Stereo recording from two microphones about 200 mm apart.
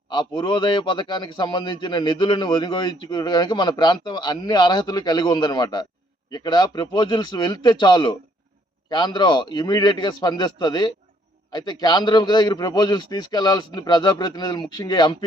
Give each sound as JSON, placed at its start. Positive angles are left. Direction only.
{"t": 0.1, "sound": "a man's voice", "side_deg": 20}